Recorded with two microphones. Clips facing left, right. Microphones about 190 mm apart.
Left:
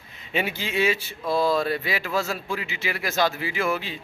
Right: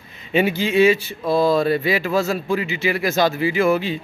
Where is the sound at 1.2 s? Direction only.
20° right (ahead or behind).